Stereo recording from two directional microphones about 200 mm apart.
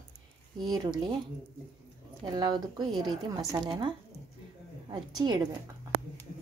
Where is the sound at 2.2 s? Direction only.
20° right (ahead or behind).